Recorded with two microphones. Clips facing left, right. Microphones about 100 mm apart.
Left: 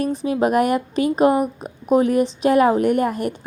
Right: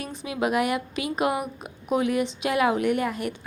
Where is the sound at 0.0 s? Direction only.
40° left (ahead or behind).